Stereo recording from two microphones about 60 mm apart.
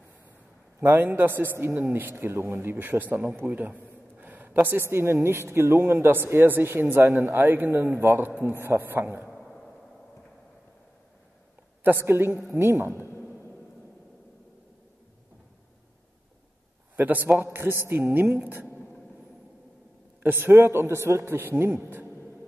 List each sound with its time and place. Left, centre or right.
0.7 s a man's voice: right
9.3 s a sound: centre
11.8 s a man's voice: right
16.9 s a man's voice: right
20.2 s a man's voice: right